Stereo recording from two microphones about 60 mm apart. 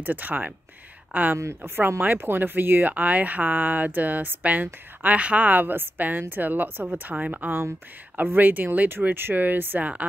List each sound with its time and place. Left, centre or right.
0.0 s a woman's voice: right
1.4 s a woman's voice: right